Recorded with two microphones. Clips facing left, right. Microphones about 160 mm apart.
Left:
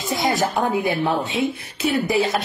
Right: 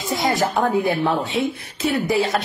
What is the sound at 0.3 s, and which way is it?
A woman's voice, centre (ahead or behind).